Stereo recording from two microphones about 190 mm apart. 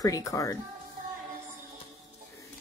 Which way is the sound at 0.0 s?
20° left (ahead or behind).